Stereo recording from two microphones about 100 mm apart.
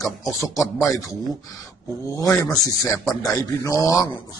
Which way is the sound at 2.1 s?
35° left (ahead or behind).